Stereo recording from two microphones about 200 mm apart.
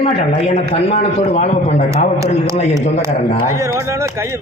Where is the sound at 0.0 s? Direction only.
30° left (ahead or behind).